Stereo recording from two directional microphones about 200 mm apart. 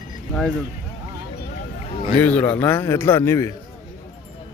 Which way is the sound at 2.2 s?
5° left (ahead or behind).